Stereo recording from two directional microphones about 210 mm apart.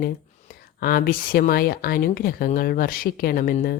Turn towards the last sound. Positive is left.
turn(degrees=40)  # may be behind; listen again after turning